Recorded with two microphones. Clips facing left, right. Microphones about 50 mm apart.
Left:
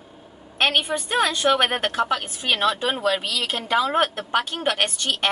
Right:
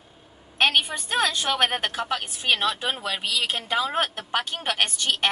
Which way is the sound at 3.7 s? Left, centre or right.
Centre.